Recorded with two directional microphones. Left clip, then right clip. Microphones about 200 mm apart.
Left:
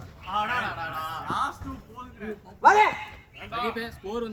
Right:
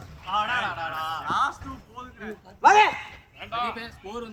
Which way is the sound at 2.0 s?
10° left (ahead or behind).